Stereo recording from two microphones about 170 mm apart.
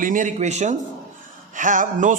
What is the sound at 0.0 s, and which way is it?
A man's voice, 50° right (ahead or behind).